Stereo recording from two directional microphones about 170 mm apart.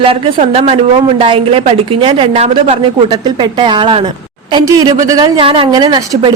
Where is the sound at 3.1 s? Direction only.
25° right (ahead or behind).